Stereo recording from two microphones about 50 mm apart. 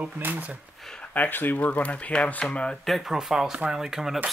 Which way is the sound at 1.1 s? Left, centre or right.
Left.